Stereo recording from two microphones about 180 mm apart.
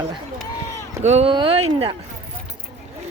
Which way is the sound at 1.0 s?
35° right (ahead or behind).